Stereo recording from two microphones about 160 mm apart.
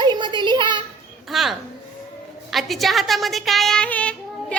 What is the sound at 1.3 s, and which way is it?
A woman's voice, centre (ahead or behind).